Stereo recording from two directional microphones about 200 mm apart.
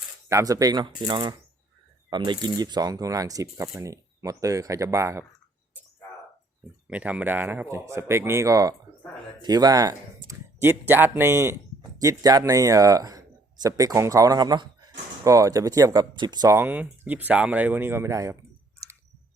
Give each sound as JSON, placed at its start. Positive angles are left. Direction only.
{"t": 0.3, "sound": "speech", "side_deg": -15}
{"t": 6.8, "sound": "speech", "side_deg": -5}